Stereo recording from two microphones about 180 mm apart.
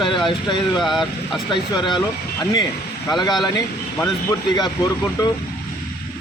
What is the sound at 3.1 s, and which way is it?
Speech, 20° left (ahead or behind).